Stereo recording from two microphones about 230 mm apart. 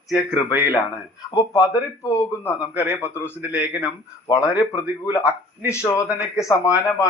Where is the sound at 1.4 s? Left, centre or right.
Centre.